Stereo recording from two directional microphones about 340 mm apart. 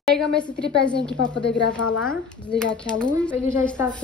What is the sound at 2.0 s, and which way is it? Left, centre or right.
A woman's voice, centre.